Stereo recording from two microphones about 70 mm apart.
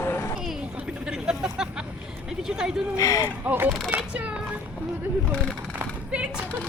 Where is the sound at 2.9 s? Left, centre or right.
Left.